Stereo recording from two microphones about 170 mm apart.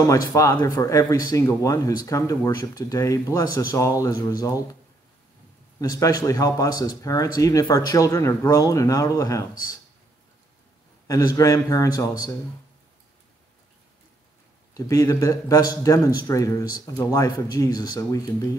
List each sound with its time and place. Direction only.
0.0 s speech: 20° left (ahead or behind)
5.8 s speech: 20° left (ahead or behind)
11.1 s speech: 20° left (ahead or behind)
14.7 s speech: 20° left (ahead or behind)